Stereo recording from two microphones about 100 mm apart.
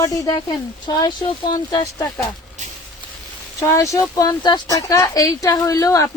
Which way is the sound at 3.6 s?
30° left (ahead or behind).